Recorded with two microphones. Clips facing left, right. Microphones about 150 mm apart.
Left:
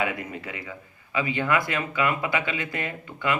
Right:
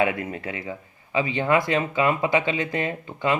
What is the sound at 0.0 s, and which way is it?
Speech, 30° right (ahead or behind).